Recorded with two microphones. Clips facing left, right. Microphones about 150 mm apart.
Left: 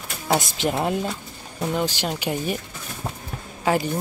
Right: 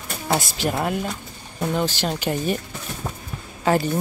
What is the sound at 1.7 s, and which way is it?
Speech, 15° left (ahead or behind).